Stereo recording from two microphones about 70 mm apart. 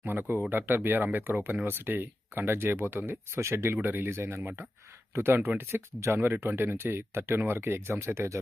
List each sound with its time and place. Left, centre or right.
0.0 s speech: right
3.3 s speech: right